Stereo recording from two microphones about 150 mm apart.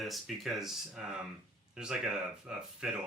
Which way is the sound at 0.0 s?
Centre (ahead or behind).